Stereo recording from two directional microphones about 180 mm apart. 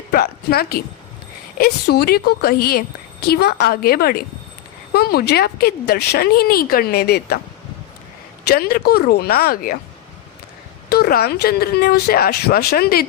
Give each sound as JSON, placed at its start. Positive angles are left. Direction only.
{"t": 0.1, "sound": "a woman's voice", "side_deg": 60}
{"t": 8.4, "sound": "a woman's voice", "side_deg": 60}
{"t": 10.8, "sound": "a woman's voice", "side_deg": 60}